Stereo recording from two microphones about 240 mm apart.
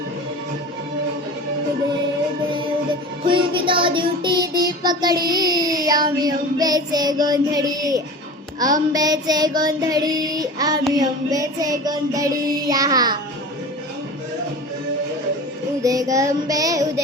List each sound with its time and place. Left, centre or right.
3.2 s music: right
15.8 s music: centre